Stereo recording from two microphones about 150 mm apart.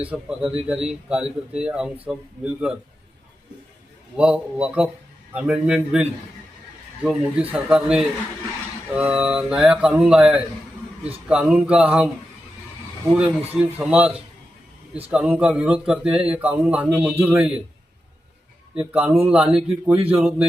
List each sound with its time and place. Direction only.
0.0 s speech: 5° right (ahead or behind)
4.2 s speech: 5° right (ahead or behind)
13.1 s speech: 5° right (ahead or behind)
15.1 s speech: 5° right (ahead or behind)
18.7 s speech: 10° right (ahead or behind)